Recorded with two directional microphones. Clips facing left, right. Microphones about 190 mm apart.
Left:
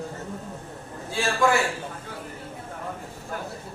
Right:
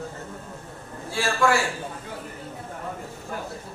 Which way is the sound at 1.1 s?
20° left (ahead or behind).